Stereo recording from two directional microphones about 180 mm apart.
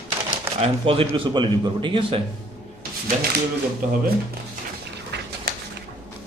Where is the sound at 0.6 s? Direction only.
30° right (ahead or behind).